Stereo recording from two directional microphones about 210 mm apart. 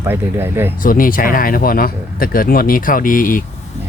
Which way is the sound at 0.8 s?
40° left (ahead or behind).